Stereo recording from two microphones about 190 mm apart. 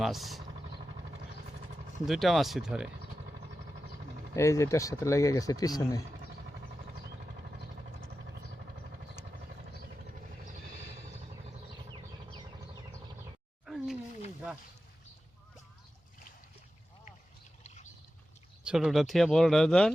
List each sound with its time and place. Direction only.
0.0 s speech: centre (ahead or behind)
2.0 s speech: centre (ahead or behind)
4.4 s speech: 15° left (ahead or behind)
13.7 s a sound: centre (ahead or behind)
18.6 s speech: 5° right (ahead or behind)